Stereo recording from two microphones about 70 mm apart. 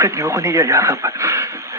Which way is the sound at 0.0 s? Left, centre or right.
Right.